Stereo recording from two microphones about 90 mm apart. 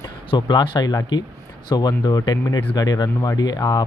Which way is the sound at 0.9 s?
50° left (ahead or behind).